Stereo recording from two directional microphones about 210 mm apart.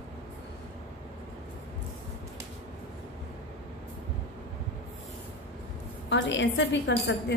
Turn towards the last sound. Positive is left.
turn(degrees=55)  # may be behind; listen again after turning